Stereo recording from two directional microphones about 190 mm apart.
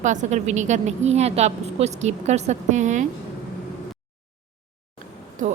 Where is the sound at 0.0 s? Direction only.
40° right (ahead or behind).